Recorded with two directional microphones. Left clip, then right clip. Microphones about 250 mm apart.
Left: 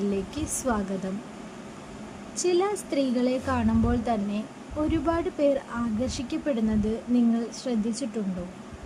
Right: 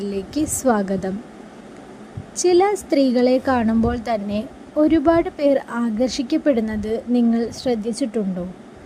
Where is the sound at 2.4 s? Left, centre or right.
Right.